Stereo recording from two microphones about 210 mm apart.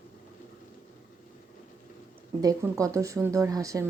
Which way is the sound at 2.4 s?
15° right (ahead or behind).